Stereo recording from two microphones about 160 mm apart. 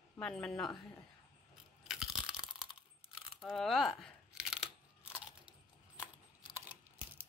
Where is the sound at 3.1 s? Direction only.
5° right (ahead or behind).